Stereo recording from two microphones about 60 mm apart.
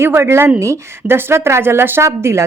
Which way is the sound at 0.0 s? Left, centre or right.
Right.